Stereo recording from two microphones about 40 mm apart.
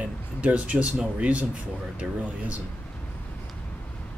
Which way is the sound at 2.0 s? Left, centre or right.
Right.